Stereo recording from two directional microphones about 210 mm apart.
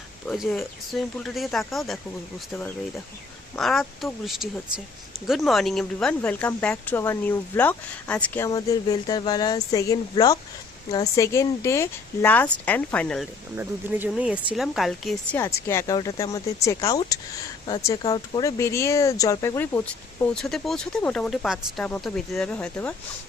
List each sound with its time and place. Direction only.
0.3 s speech: centre (ahead or behind)
3.5 s speech: centre (ahead or behind)
13.6 s speech: 5° right (ahead or behind)
15.4 s speech: 15° left (ahead or behind)